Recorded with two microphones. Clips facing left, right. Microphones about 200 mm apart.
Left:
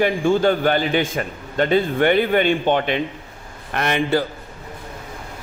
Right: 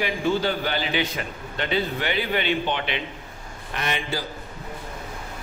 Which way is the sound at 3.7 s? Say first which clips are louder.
Left 9 dB; 60° left (ahead or behind).